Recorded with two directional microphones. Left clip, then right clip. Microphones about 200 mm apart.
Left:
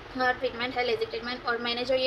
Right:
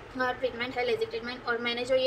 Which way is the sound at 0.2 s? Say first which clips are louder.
Left 3 dB; 15° right (ahead or behind).